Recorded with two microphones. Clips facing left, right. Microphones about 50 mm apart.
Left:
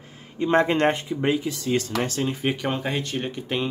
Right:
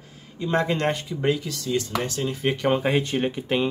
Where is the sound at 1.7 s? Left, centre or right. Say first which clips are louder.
Left 1 dB; left.